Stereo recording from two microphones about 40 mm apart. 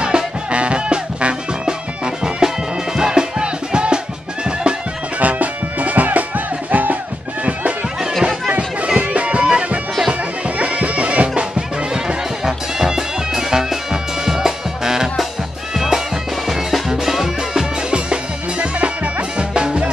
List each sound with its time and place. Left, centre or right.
0.0 s music: right
5.2 s music: right
8.2 s a sound: centre
8.5 s music: right
12.4 s music: centre
17.9 s music: right